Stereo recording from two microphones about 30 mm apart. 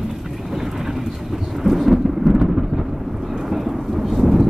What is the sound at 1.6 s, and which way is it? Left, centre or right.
Thunder, centre.